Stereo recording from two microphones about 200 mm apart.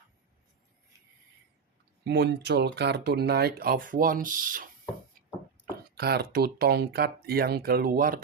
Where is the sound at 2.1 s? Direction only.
55° right (ahead or behind).